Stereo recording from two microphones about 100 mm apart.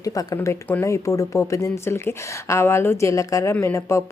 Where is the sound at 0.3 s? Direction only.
25° left (ahead or behind).